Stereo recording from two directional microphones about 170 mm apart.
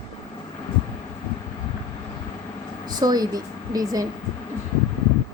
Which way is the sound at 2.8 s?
25° right (ahead or behind).